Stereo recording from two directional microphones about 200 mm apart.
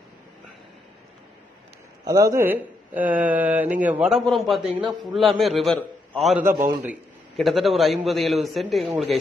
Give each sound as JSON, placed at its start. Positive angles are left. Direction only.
{"t": 2.0, "sound": "speech", "side_deg": -15}
{"t": 4.6, "sound": "a man's voice", "side_deg": -25}
{"t": 5.4, "sound": "a man's voice", "side_deg": 0}